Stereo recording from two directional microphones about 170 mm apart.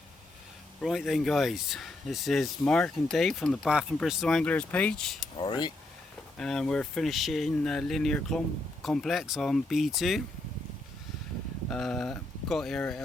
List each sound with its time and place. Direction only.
0.8 s speech: centre (ahead or behind)
5.4 s speech: 25° left (ahead or behind)
6.3 s speech: 5° left (ahead or behind)
11.7 s speech: 5° left (ahead or behind)